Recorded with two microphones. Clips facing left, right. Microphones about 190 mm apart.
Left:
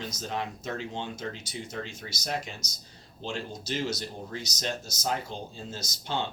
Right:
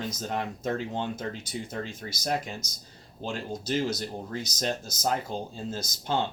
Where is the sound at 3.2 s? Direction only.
55° right (ahead or behind).